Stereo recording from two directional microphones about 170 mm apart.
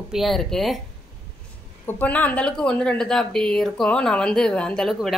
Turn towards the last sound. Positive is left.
turn(degrees=5)  # may be behind; listen again after turning